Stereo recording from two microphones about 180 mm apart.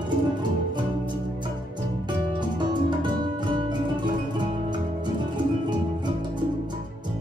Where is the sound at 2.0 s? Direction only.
25° right (ahead or behind).